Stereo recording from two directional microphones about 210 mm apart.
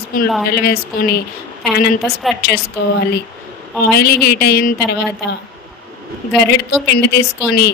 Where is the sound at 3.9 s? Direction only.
50° left (ahead or behind).